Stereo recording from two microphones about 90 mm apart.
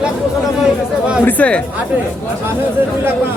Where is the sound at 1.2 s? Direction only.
15° left (ahead or behind).